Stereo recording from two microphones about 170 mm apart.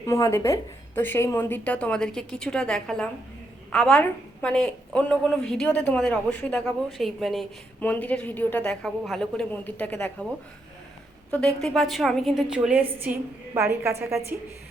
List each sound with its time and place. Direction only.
0.0 s a woman's voice: 15° left (ahead or behind); by 7.4 s centre (ahead or behind)
7.8 s a woman's voice: 10° left (ahead or behind)
11.3 s a woman's voice: 5° left (ahead or behind); by 14.3 s 15° right (ahead or behind)